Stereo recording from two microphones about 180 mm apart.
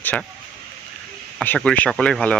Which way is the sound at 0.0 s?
10° left (ahead or behind).